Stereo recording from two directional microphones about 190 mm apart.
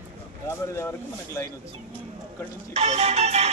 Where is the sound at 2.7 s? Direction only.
35° right (ahead or behind).